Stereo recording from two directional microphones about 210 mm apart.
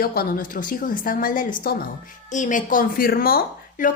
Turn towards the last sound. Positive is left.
turn(degrees=45)  # may be behind; listen again after turning